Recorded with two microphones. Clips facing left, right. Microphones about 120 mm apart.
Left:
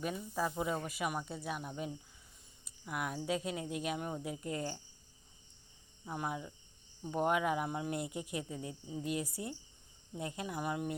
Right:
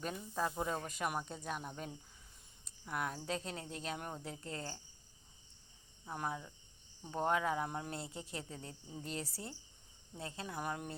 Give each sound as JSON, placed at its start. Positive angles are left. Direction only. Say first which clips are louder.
{"t": 0.0, "sound": "speech", "louder": "left 2 dB", "side_deg": 5}
{"t": 6.1, "sound": "speech", "louder": "left 2 dB", "side_deg": 10}